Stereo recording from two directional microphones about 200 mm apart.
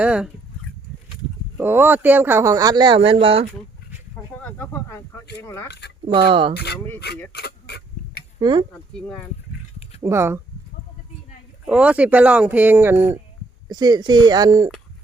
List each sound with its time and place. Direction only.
0.0 s speech: 5° right (ahead or behind)
1.5 s speech: 10° right (ahead or behind); by 3.4 s 30° right (ahead or behind)
4.4 s a sound: 10° left (ahead or behind)
5.4 s speech: 15° left (ahead or behind)
5.6 s speech: 55° left (ahead or behind)
6.1 s speech: 25° right (ahead or behind)
6.5 s speech: 55° left (ahead or behind)
7.3 s a sound: 55° left (ahead or behind)
8.4 s speech: 25° right (ahead or behind)
9.0 s speech: 5° left (ahead or behind)
10.0 s speech: 15° right (ahead or behind)
11.6 s speech: 5° right (ahead or behind)